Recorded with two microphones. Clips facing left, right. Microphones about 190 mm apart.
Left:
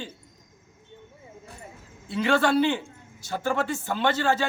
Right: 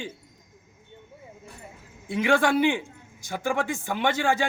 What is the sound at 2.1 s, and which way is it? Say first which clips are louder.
Speech: even; 15° right (ahead or behind).